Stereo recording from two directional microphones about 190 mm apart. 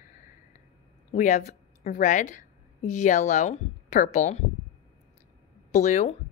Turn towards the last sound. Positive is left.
turn(degrees=40)  # may be behind; listen again after turning